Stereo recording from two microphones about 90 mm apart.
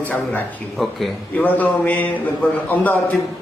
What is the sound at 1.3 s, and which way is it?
A man's voice, 20° left (ahead or behind).